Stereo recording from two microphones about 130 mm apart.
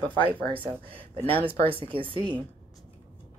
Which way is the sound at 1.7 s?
45° right (ahead or behind).